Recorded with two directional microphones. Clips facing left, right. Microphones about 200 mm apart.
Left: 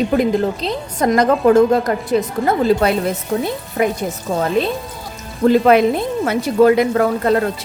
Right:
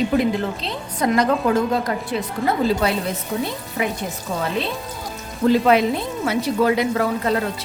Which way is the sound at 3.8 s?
45° left (ahead or behind).